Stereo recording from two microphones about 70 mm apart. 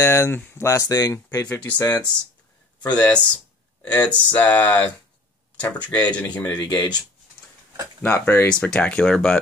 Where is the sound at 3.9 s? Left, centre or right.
Centre.